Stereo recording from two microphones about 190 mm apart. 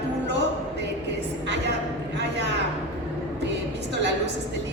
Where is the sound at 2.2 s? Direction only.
65° right (ahead or behind).